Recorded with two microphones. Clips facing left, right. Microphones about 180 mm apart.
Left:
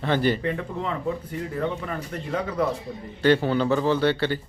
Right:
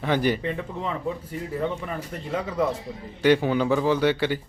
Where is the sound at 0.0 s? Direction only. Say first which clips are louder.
Even; 10° right (ahead or behind).